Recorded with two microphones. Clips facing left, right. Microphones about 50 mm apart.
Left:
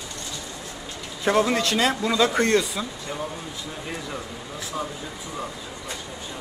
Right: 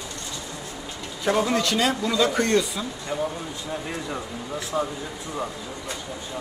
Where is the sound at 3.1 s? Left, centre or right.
Centre.